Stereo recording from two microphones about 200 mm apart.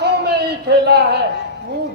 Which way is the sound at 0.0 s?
55° right (ahead or behind).